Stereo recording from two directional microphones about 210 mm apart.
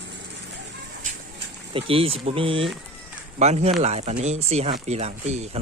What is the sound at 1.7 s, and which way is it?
Speech, 25° right (ahead or behind).